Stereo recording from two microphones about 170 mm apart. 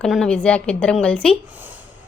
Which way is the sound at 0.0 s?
5° left (ahead or behind).